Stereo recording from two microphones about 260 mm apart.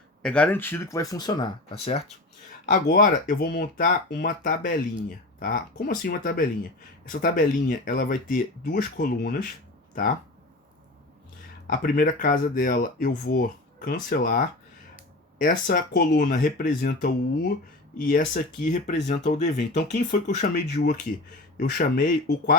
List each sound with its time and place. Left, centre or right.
0.2 s speech: centre
2.6 s speech: left
11.7 s speech: left